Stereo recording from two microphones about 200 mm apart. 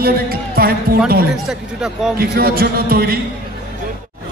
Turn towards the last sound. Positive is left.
turn(degrees=-50)  # may be behind; listen again after turning